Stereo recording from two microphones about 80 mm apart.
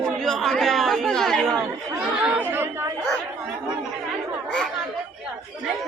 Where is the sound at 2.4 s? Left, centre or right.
Right.